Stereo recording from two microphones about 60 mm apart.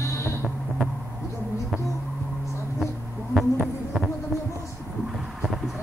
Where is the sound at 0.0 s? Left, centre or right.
Left.